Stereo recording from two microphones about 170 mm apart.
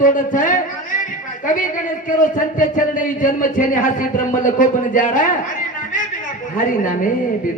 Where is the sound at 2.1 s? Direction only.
50° left (ahead or behind).